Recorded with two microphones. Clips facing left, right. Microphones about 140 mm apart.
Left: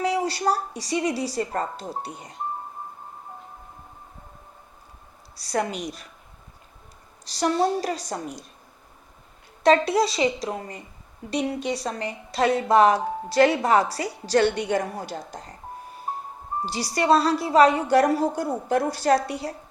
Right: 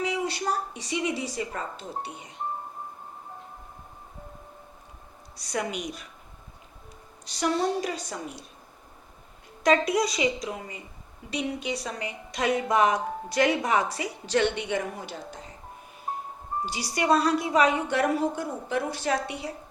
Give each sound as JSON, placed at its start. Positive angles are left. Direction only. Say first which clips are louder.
{"t": 0.0, "sound": "a woman's voice", "louder": "left 5 dB", "side_deg": 35}
{"t": 5.5, "sound": "a woman's voice", "louder": "left 4 dB", "side_deg": 35}
{"t": 7.3, "sound": "a woman's voice", "louder": "left 4 dB", "side_deg": 35}
{"t": 9.6, "sound": "a woman's voice", "louder": "left 4 dB", "side_deg": 30}
{"t": 16.7, "sound": "a woman's voice", "louder": "left 4 dB", "side_deg": 40}